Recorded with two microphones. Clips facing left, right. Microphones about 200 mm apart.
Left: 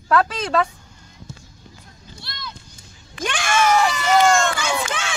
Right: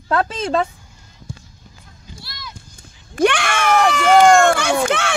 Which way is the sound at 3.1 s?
65° right (ahead or behind).